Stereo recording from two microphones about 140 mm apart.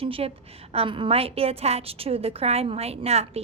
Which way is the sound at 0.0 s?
45° right (ahead or behind).